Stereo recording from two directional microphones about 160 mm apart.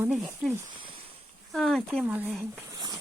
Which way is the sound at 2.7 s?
25° right (ahead or behind).